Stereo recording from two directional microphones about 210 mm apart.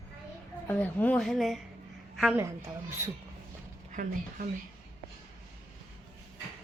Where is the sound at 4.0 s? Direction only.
35° right (ahead or behind).